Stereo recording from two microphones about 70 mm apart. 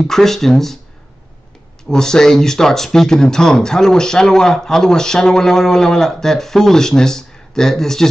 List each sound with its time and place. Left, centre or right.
0.0 s speech: centre
1.9 s speech: centre